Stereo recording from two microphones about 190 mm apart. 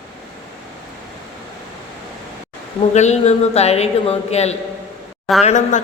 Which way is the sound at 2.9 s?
35° left (ahead or behind).